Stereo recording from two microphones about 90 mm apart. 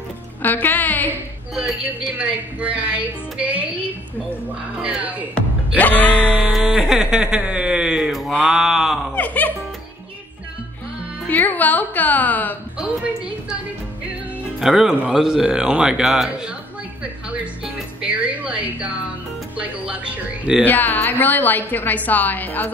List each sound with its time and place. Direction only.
0.4 s a woman's voice: 20° left (ahead or behind)
2.0 s a woman's voice: 15° right (ahead or behind)
5.8 s music: 15° left (ahead or behind)
6.5 s speech: 5° right (ahead or behind)
8.5 s a sound: 5° right (ahead or behind)
9.1 s music: 15° left (ahead or behind)
11.2 s a woman's voice: 20° left (ahead or behind)
12.7 s a woman's voice: 10° right (ahead or behind)
14.6 s a sound: 5° right (ahead or behind)
15.1 s a woman's voice: 5° right (ahead or behind)
18.0 s a woman's voice: 10° right (ahead or behind)
20.6 s a woman's voice: 20° left (ahead or behind)